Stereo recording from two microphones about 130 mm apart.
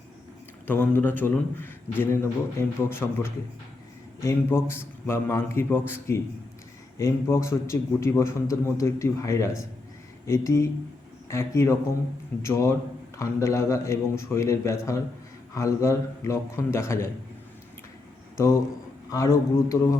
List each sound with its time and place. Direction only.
0.7 s a man's voice: 15° left (ahead or behind)
18.3 s a man's voice: 20° left (ahead or behind)